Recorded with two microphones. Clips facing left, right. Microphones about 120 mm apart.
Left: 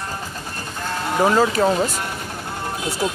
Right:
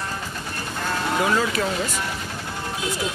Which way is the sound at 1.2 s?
35° left (ahead or behind).